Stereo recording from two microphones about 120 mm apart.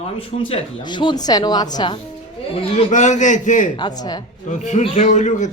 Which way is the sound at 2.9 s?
90° left.